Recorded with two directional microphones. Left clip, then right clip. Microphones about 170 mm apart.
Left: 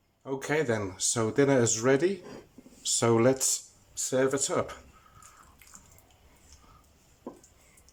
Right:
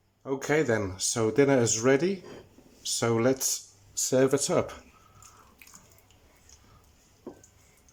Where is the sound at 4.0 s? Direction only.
10° right (ahead or behind).